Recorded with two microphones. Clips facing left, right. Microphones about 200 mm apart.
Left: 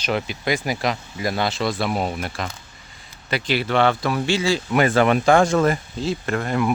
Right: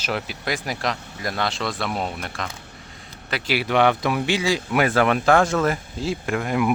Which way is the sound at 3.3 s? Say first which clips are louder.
Left 1 dB; 10° right (ahead or behind).